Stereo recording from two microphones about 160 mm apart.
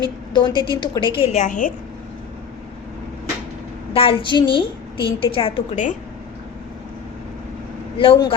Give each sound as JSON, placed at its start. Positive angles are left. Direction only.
{"t": 0.0, "sound": "a woman's voice", "side_deg": 30}
{"t": 1.4, "sound": "a woman's voice", "side_deg": 55}
{"t": 3.9, "sound": "a woman's voice", "side_deg": 35}
{"t": 7.9, "sound": "a woman's voice", "side_deg": 35}